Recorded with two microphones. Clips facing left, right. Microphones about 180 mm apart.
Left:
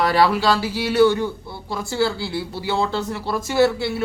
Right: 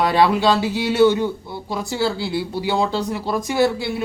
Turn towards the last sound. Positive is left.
turn(degrees=-15)  # may be behind; listen again after turning